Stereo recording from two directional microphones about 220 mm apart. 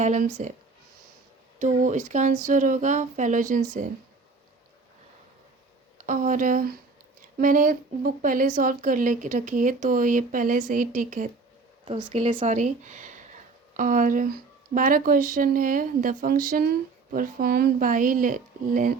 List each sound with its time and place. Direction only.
0.0 s speech: 35° right (ahead or behind)
1.5 s speech: 35° right (ahead or behind)
6.0 s speech: 35° right (ahead or behind)
11.9 s speech: 25° right (ahead or behind)